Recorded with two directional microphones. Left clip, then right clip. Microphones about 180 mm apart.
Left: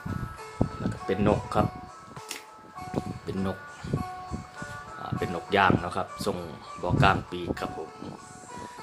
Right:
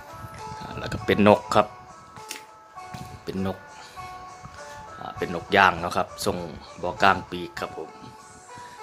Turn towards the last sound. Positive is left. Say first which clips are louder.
# even
turn(degrees=-15)  # may be behind; listen again after turning